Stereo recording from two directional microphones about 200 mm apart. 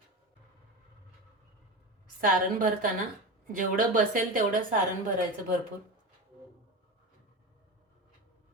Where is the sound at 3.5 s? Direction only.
45° right (ahead or behind).